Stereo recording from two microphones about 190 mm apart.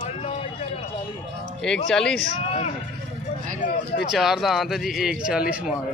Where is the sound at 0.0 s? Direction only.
35° left (ahead or behind).